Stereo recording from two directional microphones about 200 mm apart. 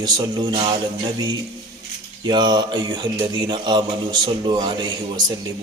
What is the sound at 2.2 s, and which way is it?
Mantra, 20° right (ahead or behind).